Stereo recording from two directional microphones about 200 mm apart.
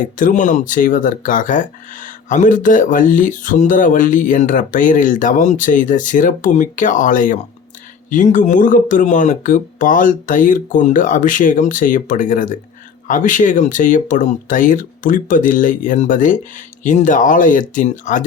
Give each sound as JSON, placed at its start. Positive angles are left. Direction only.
{"t": 0.2, "sound": "speech", "side_deg": 40}